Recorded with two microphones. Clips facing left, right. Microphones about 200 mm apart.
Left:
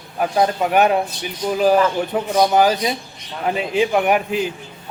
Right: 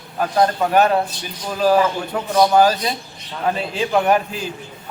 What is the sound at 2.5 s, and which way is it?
Speech, 15° left (ahead or behind).